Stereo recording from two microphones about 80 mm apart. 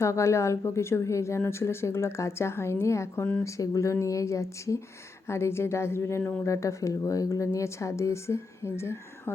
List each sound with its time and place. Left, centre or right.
0.0 s a woman's voice: left